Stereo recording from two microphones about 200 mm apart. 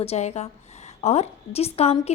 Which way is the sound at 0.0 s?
30° left (ahead or behind).